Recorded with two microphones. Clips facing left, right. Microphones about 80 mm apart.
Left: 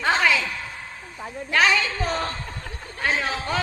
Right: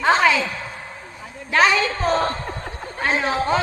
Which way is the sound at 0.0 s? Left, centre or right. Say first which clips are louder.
Right 4 dB; centre.